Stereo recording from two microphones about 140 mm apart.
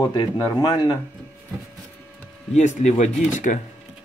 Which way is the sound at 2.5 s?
55° left (ahead or behind).